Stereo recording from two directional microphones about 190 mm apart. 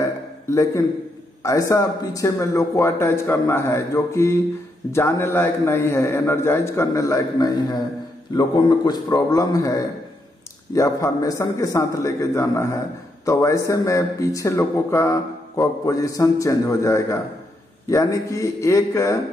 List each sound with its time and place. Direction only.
0.5 s speech: 15° left (ahead or behind)